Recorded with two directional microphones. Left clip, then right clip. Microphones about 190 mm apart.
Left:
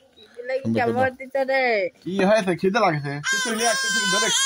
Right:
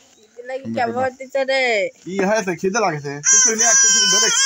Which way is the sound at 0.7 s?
15° right (ahead or behind).